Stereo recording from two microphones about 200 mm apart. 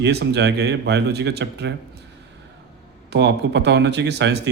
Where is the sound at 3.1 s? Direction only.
60° right (ahead or behind).